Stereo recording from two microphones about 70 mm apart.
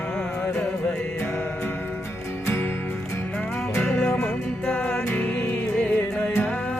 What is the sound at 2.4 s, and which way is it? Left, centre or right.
Music, left.